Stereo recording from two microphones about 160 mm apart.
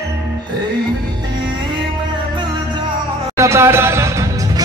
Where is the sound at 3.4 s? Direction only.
15° right (ahead or behind).